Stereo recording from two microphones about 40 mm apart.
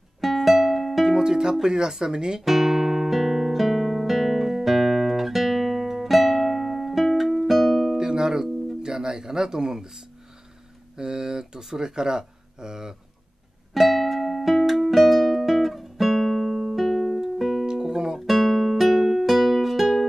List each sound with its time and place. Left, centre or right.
0.2 s music: centre
1.0 s speech: centre
2.4 s music: centre
8.0 s guitar: centre
8.8 s music: centre
11.0 s speech: centre
13.7 s music: centre
17.6 s guitar: centre
18.2 s music: centre